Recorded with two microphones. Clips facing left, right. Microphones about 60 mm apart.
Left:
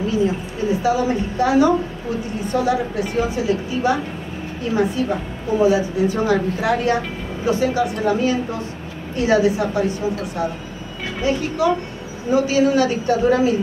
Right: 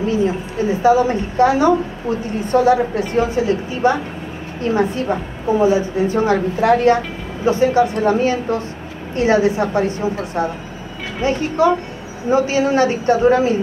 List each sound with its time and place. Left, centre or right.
0.8 s a woman's voice: right